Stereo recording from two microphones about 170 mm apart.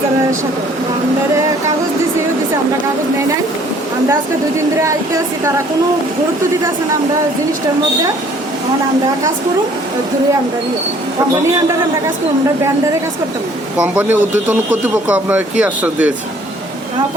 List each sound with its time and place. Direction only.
4.8 s speech: 15° right (ahead or behind)
13.7 s speech: 10° right (ahead or behind)